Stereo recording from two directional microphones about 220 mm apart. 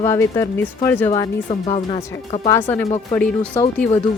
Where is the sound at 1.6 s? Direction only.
30° left (ahead or behind).